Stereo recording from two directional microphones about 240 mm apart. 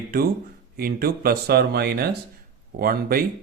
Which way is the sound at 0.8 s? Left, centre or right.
Right.